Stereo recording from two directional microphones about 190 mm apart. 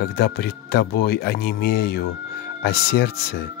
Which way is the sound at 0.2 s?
55° left (ahead or behind).